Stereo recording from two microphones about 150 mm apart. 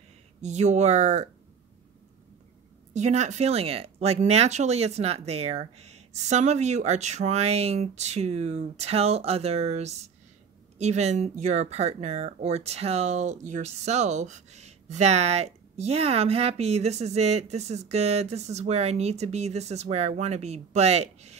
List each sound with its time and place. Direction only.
0.4 s speech: 50° right (ahead or behind)
2.9 s speech: 50° right (ahead or behind)